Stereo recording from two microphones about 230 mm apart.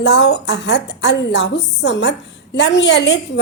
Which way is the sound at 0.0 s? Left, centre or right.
Left.